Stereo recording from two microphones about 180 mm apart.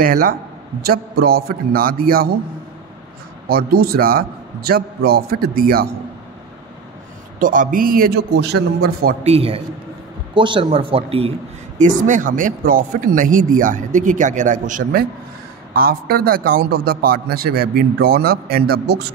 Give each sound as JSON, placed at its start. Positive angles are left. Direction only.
{"t": 0.0, "sound": "a man's voice", "side_deg": -55}
{"t": 3.4, "sound": "a man's voice", "side_deg": -55}
{"t": 7.3, "sound": "a man's voice", "side_deg": -50}
{"t": 9.2, "sound": "a man's voice", "side_deg": -35}
{"t": 11.8, "sound": "a man's voice", "side_deg": -45}